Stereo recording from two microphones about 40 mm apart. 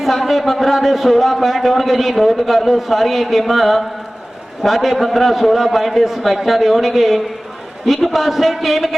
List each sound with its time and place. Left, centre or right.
0.0 s a man's voice: centre